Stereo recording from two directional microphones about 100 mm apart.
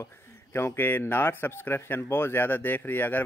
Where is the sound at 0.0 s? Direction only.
25° left (ahead or behind).